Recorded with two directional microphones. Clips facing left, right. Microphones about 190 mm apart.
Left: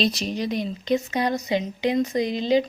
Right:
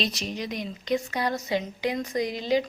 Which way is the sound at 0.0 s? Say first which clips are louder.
Left 6 dB; 30° left (ahead or behind).